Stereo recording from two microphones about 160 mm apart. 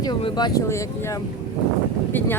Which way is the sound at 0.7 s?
20° left (ahead or behind).